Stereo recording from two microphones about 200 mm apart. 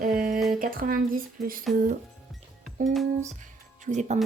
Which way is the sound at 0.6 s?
45° right (ahead or behind).